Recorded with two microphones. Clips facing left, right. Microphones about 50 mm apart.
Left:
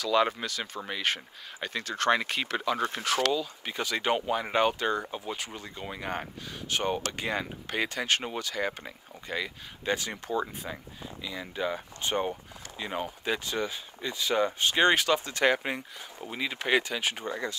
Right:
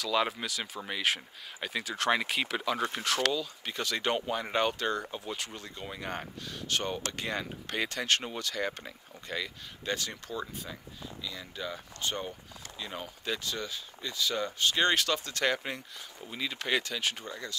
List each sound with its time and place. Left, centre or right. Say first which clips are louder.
0.0 s speech: left 4 dB; centre; by 17.6 s left